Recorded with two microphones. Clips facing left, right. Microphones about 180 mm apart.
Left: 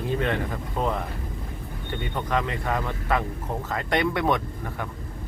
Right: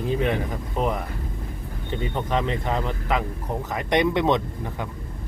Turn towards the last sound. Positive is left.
turn(degrees=-20)  # may be behind; listen again after turning